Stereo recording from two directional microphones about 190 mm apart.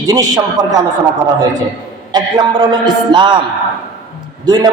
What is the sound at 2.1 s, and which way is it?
A man's voice, 25° right (ahead or behind).